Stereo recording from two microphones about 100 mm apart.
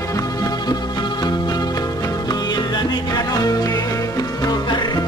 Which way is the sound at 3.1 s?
40° left (ahead or behind).